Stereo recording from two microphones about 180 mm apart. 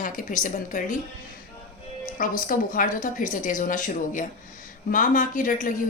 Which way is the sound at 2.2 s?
50° left (ahead or behind).